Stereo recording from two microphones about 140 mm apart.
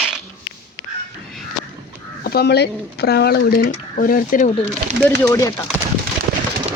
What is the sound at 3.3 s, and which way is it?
Speech, 90° left.